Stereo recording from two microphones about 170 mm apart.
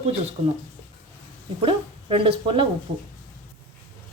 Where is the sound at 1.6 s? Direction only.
35° right (ahead or behind).